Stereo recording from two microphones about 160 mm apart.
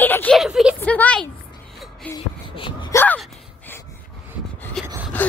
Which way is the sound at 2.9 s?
15° left (ahead or behind).